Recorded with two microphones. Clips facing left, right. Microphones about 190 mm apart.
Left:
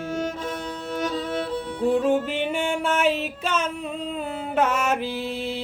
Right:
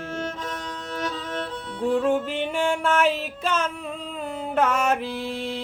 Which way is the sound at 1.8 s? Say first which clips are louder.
Left 1 dB; centre (ahead or behind).